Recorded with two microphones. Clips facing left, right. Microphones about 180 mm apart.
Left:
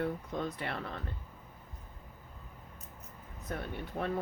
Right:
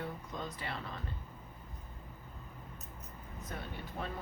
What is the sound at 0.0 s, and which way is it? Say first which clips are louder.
Speech: left 7 dB; 60° left (ahead or behind).